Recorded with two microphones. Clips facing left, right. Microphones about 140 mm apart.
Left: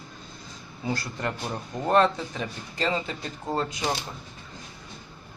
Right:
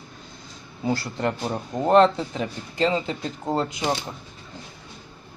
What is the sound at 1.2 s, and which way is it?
Speech, 25° right (ahead or behind).